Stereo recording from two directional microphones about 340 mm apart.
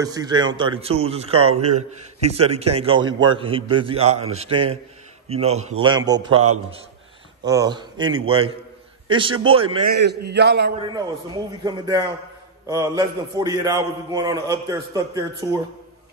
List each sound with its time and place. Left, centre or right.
0.0 s a man's voice: centre
6.3 s a man's voice: right
7.4 s a man's voice: centre
9.8 s a man's voice: right
10.8 s a man's voice: centre